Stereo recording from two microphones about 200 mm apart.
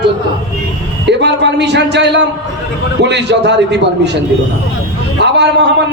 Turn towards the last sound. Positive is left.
turn(degrees=-60)  # may be behind; listen again after turning